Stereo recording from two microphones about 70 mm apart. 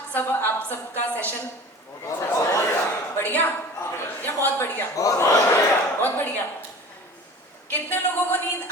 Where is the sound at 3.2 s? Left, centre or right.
Left.